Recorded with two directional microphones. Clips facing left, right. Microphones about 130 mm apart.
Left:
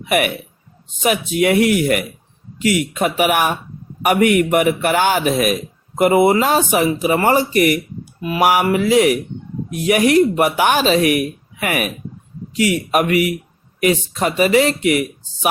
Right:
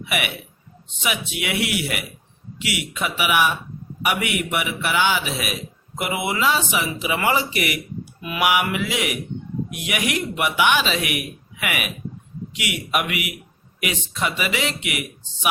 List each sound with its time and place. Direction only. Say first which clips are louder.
0.0 s speech: left 9 dB; 45° left (ahead or behind)